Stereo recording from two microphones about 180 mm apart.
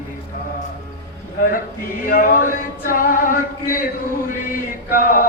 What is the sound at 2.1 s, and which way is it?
Male singing, 50° left (ahead or behind).